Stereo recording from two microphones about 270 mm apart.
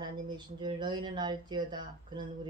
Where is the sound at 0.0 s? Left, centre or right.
Centre.